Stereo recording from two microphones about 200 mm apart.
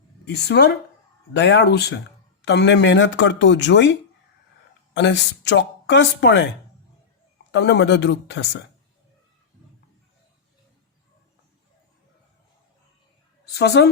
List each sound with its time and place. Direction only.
0.3 s speech: 55° left (ahead or behind)
4.9 s speech: 60° left (ahead or behind)
7.5 s speech: 60° left (ahead or behind)
13.5 s a woman's voice: 55° left (ahead or behind)